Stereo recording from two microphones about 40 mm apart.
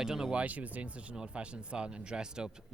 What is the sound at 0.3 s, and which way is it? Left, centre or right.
Speech, right.